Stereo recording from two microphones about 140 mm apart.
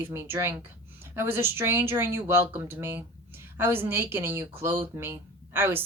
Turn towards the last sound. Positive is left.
turn(degrees=-15)  # may be behind; listen again after turning